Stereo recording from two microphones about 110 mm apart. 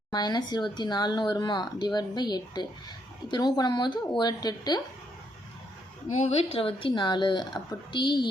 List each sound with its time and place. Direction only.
0.1 s speech: 40° left (ahead or behind)
6.1 s speech: 70° left (ahead or behind); by 8.2 s 40° left (ahead or behind)